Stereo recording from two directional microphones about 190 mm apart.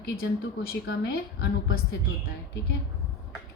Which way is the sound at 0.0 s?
55° left (ahead or behind).